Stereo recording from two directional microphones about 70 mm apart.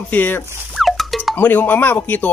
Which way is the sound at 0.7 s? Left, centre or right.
Centre.